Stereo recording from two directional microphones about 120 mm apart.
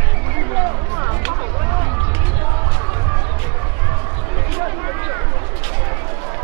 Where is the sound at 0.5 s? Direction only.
25° right (ahead or behind).